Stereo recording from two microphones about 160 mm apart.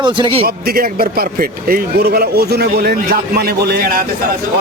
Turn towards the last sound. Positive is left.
turn(degrees=-65)  # may be behind; listen again after turning